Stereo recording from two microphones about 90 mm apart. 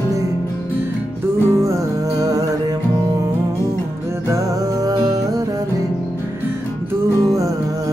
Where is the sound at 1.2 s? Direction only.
25° right (ahead or behind).